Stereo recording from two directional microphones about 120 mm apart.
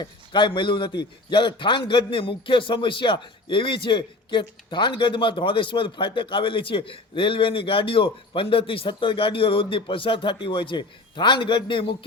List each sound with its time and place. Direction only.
0.0 s a man's voice: 45° left (ahead or behind)